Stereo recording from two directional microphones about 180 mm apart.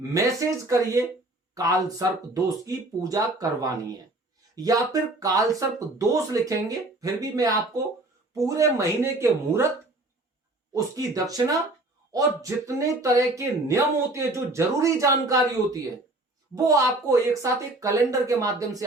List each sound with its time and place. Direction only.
0.1 s speech: 15° right (ahead or behind)
10.8 s speech: 20° right (ahead or behind)
16.6 s speech: 20° right (ahead or behind)